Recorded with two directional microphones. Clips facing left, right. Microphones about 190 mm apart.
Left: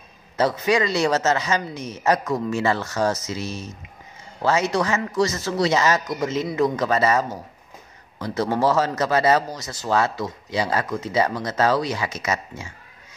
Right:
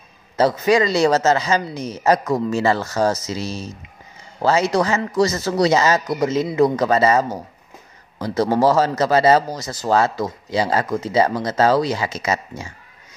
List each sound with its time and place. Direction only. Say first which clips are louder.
0.4 s a man's voice: right 4 dB; 35° right (ahead or behind)